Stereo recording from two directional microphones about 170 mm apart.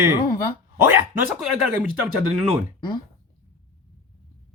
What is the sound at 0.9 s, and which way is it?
Speech, 10° right (ahead or behind).